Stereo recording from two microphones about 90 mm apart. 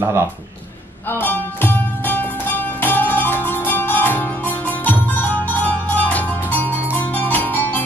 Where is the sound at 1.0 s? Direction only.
25° left (ahead or behind).